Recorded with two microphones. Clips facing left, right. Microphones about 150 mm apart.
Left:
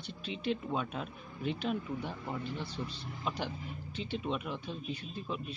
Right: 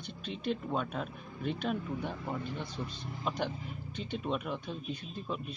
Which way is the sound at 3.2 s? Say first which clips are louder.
Right 2 dB; 5° left (ahead or behind).